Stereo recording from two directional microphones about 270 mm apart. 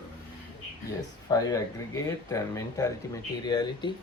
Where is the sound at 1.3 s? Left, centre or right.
Centre.